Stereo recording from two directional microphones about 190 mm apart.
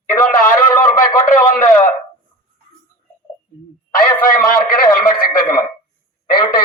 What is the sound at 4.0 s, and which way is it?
Speech, 45° left (ahead or behind).